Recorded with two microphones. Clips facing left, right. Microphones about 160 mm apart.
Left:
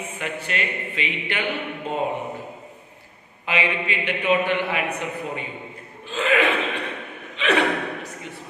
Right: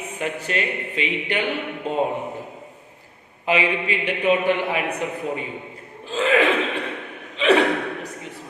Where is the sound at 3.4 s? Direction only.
35° right (ahead or behind).